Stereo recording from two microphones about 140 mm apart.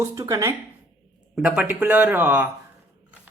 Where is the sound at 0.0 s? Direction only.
20° right (ahead or behind).